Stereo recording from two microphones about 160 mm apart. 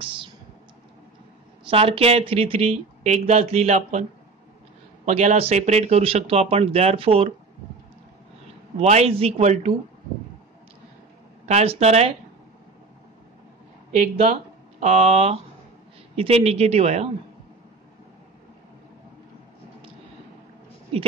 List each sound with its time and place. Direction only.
1.7 s speech: 35° right (ahead or behind)
5.0 s speech: 45° right (ahead or behind)
8.7 s a man's voice: 40° right (ahead or behind)
11.4 s a man's voice: 40° right (ahead or behind)
14.1 s speech: 45° right (ahead or behind)
20.9 s speech: 35° right (ahead or behind)